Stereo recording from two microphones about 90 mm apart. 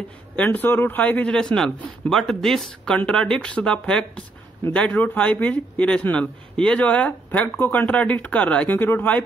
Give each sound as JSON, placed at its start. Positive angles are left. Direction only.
{"t": 0.4, "sound": "a man's voice", "side_deg": 20}